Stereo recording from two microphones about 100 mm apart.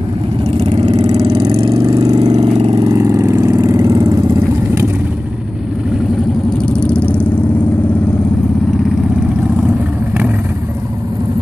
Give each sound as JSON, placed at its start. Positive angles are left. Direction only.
{"t": 0.5, "sound": "vehicle", "side_deg": -80}
{"t": 1.5, "sound": "vehicle", "side_deg": -65}
{"t": 1.9, "sound": "vehicle", "side_deg": -45}
{"t": 2.3, "sound": "vehicle", "side_deg": -90}
{"t": 2.8, "sound": "vehicle", "side_deg": -35}
{"t": 6.6, "sound": "vehicle", "side_deg": 10}